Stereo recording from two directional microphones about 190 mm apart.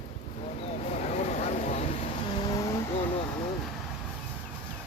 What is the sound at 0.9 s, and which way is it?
Vehicle, 35° left (ahead or behind).